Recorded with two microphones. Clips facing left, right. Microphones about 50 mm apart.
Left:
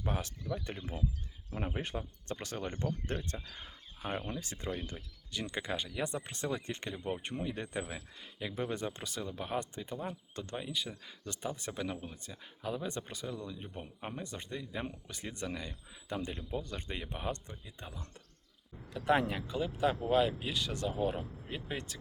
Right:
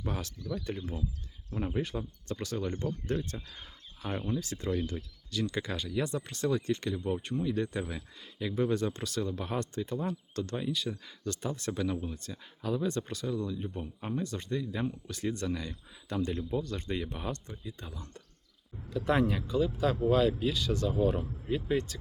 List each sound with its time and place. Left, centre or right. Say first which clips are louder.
0.0 s speech: right 1 dB; left
1.8 s speech: right 4 dB; left
3.5 s a sound: even; left
4.3 s speech: right 6 dB; left
18.9 s speech: right 2 dB; left